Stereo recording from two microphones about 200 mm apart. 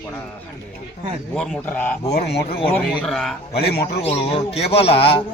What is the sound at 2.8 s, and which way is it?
Speech, centre (ahead or behind).